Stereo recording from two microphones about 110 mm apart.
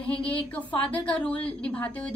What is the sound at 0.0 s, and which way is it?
A woman's voice, 15° left (ahead or behind).